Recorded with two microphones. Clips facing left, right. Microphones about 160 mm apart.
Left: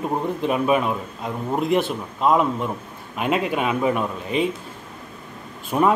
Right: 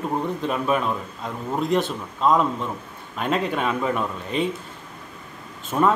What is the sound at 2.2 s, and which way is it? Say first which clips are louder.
A man's voice: left 1 dB; 5° left (ahead or behind).